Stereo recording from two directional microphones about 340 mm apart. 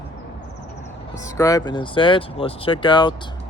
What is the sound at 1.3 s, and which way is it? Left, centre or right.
Speech, centre.